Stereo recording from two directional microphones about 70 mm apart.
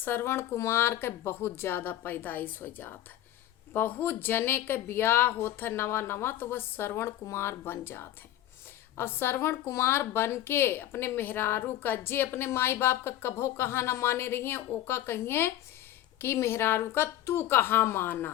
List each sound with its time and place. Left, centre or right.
0.0 s a woman's voice: left